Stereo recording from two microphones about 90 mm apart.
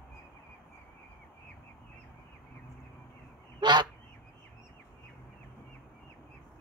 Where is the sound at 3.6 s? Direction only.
55° right (ahead or behind).